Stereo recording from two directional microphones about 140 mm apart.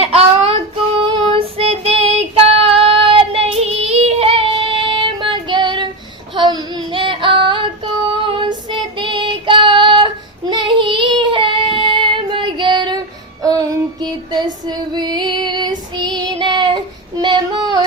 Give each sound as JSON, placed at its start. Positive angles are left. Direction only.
{"t": 0.0, "sound": "child singing", "side_deg": -45}
{"t": 13.4, "sound": "female singing", "side_deg": -25}